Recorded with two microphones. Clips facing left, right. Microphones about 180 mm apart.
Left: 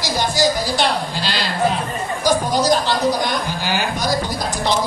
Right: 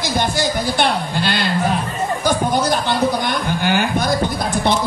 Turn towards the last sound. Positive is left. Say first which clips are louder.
# right 3 dB
turn(degrees=-55)  # may be behind; listen again after turning